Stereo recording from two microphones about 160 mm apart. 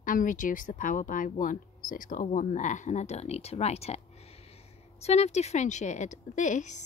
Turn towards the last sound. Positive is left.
turn(degrees=50)  # may be behind; listen again after turning